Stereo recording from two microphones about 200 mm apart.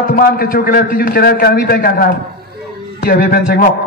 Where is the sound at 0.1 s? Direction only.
45° left (ahead or behind).